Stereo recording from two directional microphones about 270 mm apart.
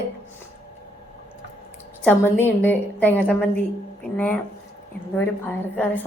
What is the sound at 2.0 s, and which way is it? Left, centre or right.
A woman's voice, centre.